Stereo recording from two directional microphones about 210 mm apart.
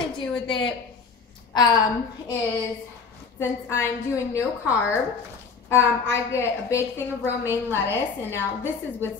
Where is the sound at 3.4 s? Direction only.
10° left (ahead or behind).